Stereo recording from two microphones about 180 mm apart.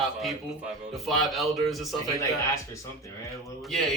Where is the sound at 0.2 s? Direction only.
Centre (ahead or behind).